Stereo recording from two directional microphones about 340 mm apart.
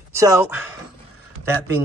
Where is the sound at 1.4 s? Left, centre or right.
Centre.